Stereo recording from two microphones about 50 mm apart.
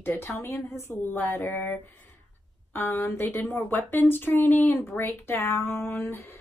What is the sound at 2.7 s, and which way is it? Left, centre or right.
Speech, left.